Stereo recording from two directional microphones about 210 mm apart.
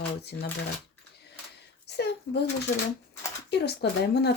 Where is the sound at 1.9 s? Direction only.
50° left (ahead or behind).